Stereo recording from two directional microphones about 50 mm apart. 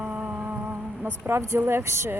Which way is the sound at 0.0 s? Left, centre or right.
Right.